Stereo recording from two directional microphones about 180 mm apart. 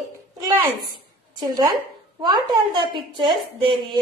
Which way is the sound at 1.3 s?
20° right (ahead or behind).